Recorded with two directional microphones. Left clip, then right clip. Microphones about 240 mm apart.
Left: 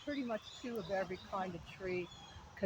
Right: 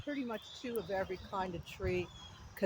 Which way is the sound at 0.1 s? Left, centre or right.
Right.